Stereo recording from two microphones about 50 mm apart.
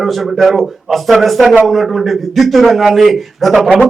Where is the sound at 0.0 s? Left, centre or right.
Centre.